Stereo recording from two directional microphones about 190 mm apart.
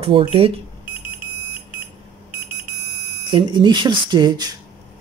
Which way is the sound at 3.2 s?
25° right (ahead or behind).